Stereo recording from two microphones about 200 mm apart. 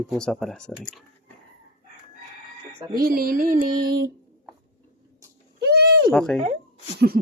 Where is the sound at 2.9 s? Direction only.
45° right (ahead or behind).